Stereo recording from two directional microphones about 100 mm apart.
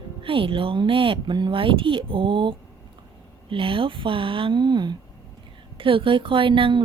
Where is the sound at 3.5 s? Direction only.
60° right (ahead or behind).